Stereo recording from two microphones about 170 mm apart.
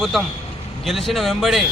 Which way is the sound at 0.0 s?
Centre (ahead or behind).